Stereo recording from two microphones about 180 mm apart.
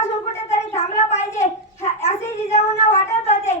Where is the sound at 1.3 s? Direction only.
15° left (ahead or behind).